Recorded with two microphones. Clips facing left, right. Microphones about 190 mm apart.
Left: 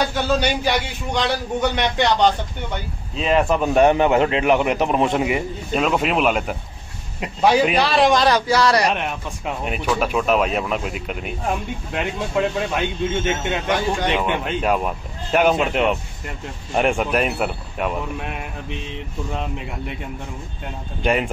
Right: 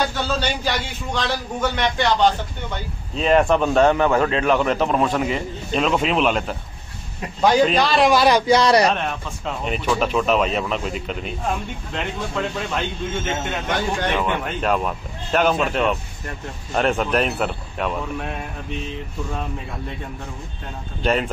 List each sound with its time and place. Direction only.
0.1 s speech: 15° left (ahead or behind)
3.2 s a man's voice: centre (ahead or behind); by 8.8 s 20° right (ahead or behind)
9.7 s speech: 5° left (ahead or behind)
21.0 s speech: 15° left (ahead or behind)